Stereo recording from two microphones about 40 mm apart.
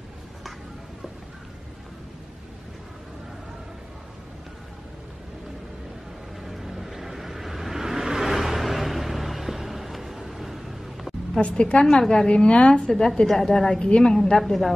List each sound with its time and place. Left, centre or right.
6.4 s vehicle: centre
11.4 s a woman's voice: left
11.8 s a woman's voice: centre
12.3 s a woman's voice: left; by 13.7 s centre
13.7 s a woman's voice: left
14.3 s a woman's voice: centre